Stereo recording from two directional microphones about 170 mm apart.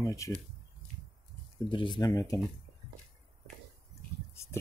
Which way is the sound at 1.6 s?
30° left (ahead or behind).